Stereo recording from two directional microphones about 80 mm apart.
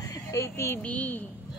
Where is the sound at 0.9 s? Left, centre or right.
Centre.